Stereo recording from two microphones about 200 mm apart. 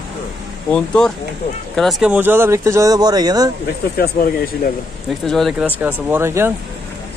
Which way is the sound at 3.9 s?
50° left (ahead or behind).